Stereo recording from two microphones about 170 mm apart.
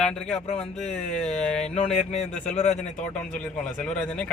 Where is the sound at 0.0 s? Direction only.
5° left (ahead or behind).